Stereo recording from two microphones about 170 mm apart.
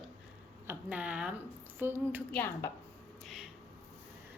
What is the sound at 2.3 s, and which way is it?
Speech, 10° left (ahead or behind).